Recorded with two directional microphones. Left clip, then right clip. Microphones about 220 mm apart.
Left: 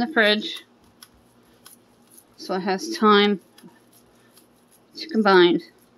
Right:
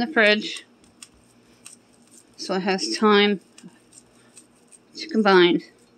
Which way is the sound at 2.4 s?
5° right (ahead or behind).